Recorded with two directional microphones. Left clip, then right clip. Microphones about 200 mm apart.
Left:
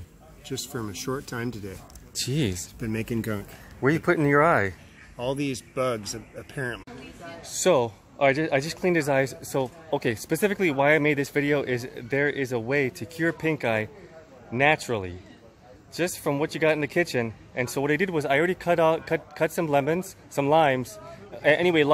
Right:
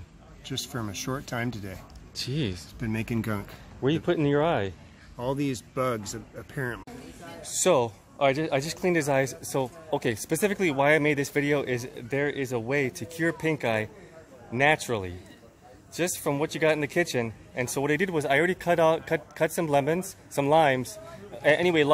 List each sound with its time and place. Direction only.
0.5 s speech: 15° right (ahead or behind)
2.1 s speech: 25° left (ahead or behind)
2.8 s speech: 5° right (ahead or behind)
4.0 s speech: 20° left (ahead or behind)
5.1 s speech: 10° right (ahead or behind)
7.4 s speech: 5° left (ahead or behind)